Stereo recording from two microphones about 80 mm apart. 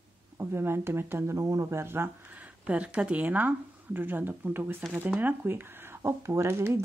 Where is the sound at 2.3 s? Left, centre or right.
Centre.